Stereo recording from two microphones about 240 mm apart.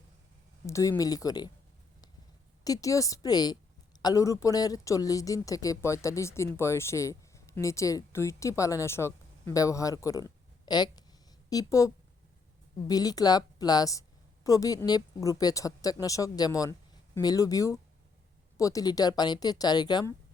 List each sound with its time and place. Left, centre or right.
0.7 s a woman's voice: centre
2.6 s a woman's voice: centre
12.9 s a woman's voice: centre